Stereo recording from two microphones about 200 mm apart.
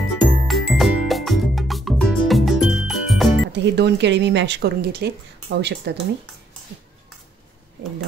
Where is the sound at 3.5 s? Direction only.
60° right (ahead or behind).